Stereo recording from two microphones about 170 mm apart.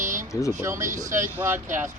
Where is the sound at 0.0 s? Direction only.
50° right (ahead or behind).